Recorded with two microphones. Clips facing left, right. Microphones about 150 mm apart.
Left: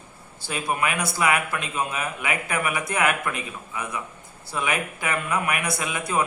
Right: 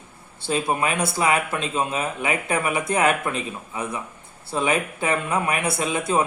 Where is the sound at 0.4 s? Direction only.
25° right (ahead or behind).